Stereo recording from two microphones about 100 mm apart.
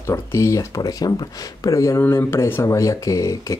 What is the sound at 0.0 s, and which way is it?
Speech, 30° left (ahead or behind).